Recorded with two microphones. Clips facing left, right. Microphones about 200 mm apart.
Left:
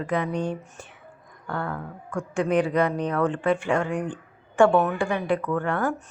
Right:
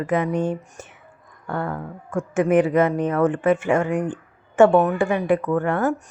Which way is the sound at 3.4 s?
20° right (ahead or behind).